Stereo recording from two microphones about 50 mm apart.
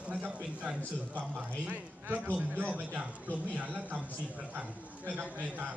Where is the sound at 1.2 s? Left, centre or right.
Right.